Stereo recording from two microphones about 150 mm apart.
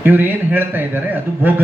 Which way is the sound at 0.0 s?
15° right (ahead or behind).